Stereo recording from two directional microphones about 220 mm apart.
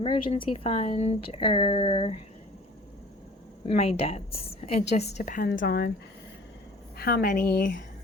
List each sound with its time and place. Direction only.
0.0 s speech: 25° left (ahead or behind)
3.9 s speech: 25° left (ahead or behind); by 5.9 s 45° left (ahead or behind)
6.9 s a woman's voice: 45° left (ahead or behind)